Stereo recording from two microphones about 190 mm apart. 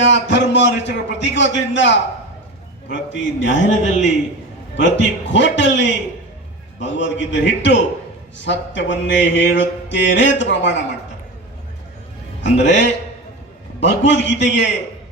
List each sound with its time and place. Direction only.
0.0 s a man's voice: 70° left (ahead or behind)
2.9 s mantra: 70° left (ahead or behind)
4.8 s mantra: 70° left (ahead or behind)
12.5 s mantra: 70° left (ahead or behind)